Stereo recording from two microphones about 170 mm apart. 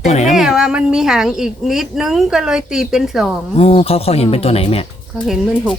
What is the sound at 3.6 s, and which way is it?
Speech, 35° left (ahead or behind).